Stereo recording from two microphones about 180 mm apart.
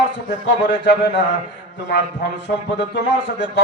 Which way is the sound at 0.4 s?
75° left (ahead or behind).